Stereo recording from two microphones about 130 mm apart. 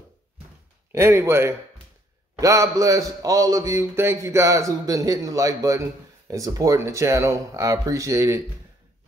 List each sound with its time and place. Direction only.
0.9 s a man's voice: 20° right (ahead or behind)